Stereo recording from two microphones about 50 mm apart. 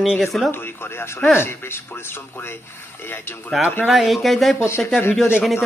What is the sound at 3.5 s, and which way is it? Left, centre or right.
Speech, centre.